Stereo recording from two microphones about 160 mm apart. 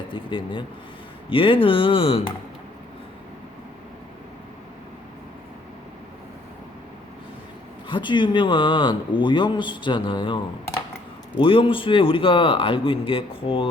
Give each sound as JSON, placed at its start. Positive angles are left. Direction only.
{"t": 0.1, "sound": "a man's voice", "side_deg": 30}
{"t": 7.9, "sound": "a man's voice", "side_deg": 30}